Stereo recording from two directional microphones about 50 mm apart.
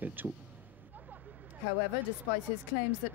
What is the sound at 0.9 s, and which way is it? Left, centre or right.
Vehicle, right.